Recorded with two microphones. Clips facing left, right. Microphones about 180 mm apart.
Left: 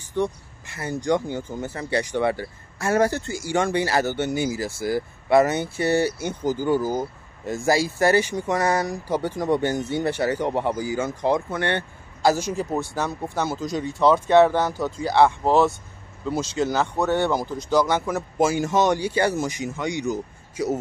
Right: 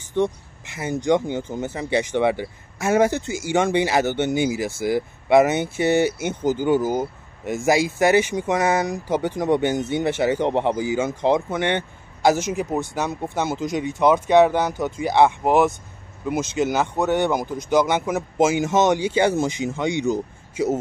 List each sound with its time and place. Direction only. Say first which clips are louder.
0.2 s speech: right 3 dB; 20° right (ahead or behind)